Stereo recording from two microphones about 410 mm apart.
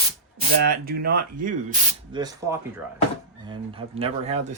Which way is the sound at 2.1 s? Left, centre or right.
Centre.